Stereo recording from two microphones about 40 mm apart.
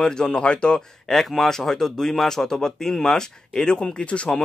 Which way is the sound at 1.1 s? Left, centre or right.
Centre.